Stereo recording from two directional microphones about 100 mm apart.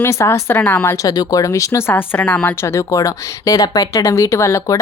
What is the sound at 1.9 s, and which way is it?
A woman's voice, 15° left (ahead or behind).